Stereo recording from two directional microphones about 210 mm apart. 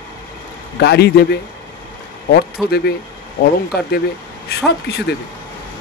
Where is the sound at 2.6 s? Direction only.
50° left (ahead or behind).